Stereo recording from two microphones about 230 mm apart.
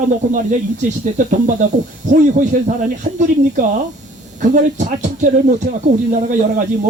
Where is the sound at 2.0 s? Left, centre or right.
Right.